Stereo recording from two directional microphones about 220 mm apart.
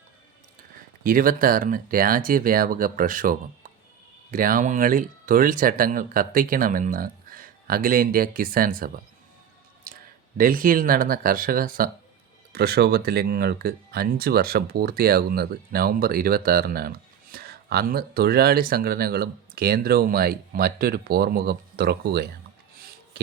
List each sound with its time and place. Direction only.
1.0 s speech: 40° right (ahead or behind)